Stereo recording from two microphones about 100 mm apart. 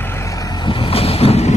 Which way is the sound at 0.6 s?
70° left (ahead or behind).